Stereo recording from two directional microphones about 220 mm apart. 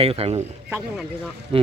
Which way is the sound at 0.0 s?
25° right (ahead or behind).